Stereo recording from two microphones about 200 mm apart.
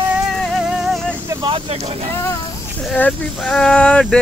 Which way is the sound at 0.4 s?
Centre (ahead or behind).